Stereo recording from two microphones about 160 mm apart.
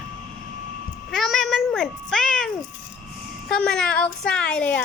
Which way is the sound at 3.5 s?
5° left (ahead or behind).